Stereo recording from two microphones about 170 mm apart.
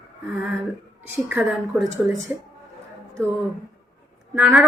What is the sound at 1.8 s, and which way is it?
Speech, centre (ahead or behind).